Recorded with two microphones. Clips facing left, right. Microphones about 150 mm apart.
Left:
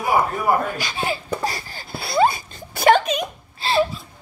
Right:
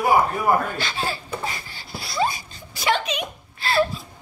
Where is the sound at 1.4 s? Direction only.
40° left (ahead or behind).